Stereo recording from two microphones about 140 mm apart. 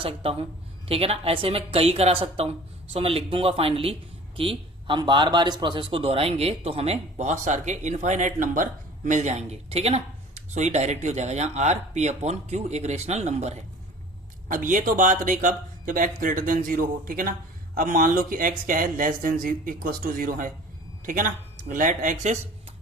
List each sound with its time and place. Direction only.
0.0 s speech: 40° right (ahead or behind)
14.4 s speech: 70° right (ahead or behind)
21.0 s speech: 70° right (ahead or behind)